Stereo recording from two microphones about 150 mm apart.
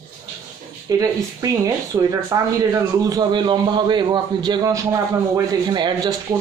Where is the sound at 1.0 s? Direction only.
20° right (ahead or behind).